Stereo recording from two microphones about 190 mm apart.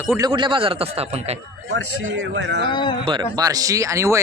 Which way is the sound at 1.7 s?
70° right (ahead or behind).